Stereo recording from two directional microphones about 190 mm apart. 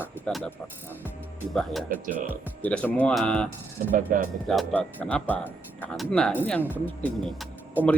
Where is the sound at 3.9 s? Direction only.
50° right (ahead or behind).